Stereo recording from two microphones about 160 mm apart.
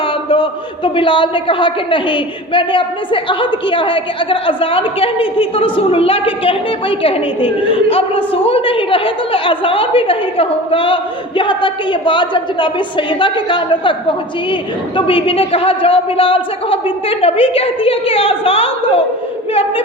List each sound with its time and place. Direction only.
0.9 s a woman's voice: 30° left (ahead or behind)